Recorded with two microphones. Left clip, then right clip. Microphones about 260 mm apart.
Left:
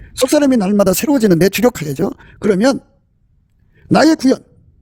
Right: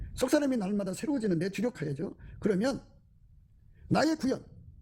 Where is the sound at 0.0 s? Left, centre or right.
Left.